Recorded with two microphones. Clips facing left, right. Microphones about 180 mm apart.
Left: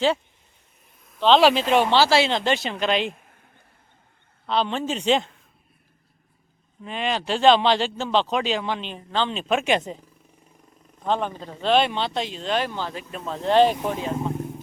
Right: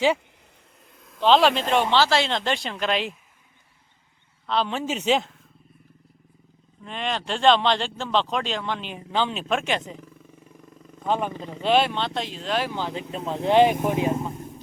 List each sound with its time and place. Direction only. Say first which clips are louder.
1.4 s speech: left 3 dB; 5° left (ahead or behind)
4.4 s speech: left 1 dB; centre (ahead or behind)
6.8 s speech: left 3 dB; 5° left (ahead or behind)
8.8 s speech: even; 10° right (ahead or behind)
9.6 s speech: left 5 dB; 15° left (ahead or behind)
11.0 s speech: even; 5° right (ahead or behind)
11.9 s speech: left 1 dB; centre (ahead or behind)
12.7 s speech: right 2 dB; 20° right (ahead or behind)